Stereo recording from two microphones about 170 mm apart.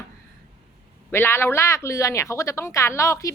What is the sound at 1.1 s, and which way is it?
Speech, 15° left (ahead or behind).